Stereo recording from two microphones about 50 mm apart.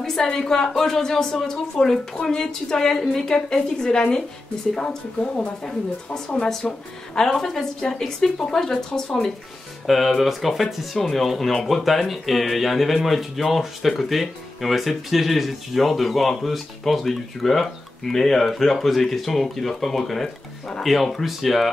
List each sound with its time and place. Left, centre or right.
0.0 s a woman's voice: centre
6.6 s a woman's voice: centre